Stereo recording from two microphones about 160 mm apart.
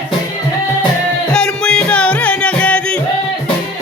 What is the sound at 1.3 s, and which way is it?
Music, 5° left (ahead or behind).